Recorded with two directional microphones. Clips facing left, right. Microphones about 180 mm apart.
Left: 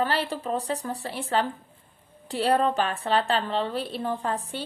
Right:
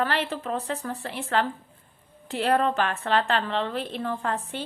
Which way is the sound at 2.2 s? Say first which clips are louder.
Even; 35° left (ahead or behind).